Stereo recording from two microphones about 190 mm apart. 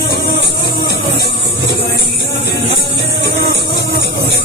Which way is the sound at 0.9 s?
60° left (ahead or behind).